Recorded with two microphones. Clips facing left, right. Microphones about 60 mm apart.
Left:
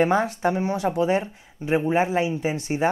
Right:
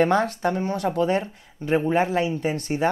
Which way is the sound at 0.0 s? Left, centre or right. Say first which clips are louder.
Even; centre.